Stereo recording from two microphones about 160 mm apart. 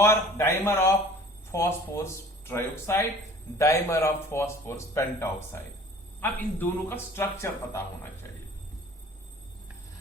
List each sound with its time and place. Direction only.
0.0 s a man's voice: 15° left (ahead or behind)